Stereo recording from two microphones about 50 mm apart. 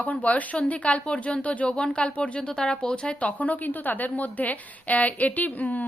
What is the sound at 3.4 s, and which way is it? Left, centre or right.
A woman's voice, left.